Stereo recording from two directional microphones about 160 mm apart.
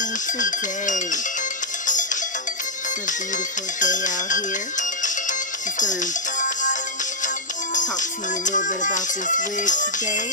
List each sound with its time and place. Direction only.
0.4 s music: 50° left (ahead or behind)
3.8 s speech: 50° left (ahead or behind)
5.8 s music: 50° left (ahead or behind)